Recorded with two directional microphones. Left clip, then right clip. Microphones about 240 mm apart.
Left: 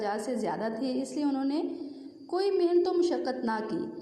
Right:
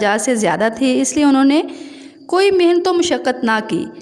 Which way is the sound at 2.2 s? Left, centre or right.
Right.